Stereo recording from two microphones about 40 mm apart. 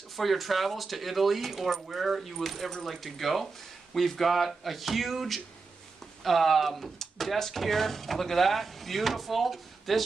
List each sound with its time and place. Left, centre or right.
0.1 s speech: centre